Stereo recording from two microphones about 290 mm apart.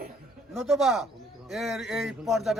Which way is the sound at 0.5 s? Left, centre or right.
Centre.